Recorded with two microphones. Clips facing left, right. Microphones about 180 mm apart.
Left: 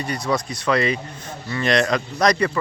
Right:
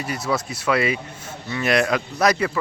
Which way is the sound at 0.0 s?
5° right (ahead or behind).